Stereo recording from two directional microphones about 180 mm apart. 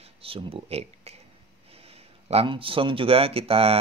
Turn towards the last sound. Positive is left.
turn(degrees=-30)  # may be behind; listen again after turning